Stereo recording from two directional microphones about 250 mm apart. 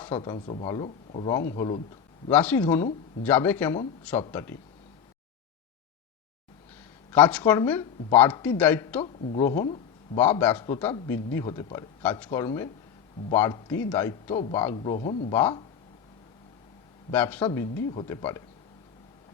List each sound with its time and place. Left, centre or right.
0.2 s a man's voice: left
7.1 s a man's voice: centre
9.0 s speech: left
10.2 s a man's voice: centre
14.8 s speech: left
15.3 s a man's voice: centre
17.1 s a man's voice: centre